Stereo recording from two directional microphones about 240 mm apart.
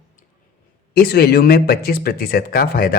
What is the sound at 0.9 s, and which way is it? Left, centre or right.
Speech, left.